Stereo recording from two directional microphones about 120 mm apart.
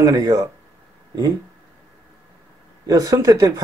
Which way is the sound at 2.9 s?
30° right (ahead or behind).